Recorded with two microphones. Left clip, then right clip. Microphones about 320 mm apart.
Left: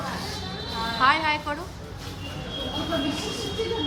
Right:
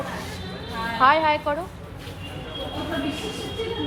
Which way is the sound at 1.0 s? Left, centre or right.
Centre.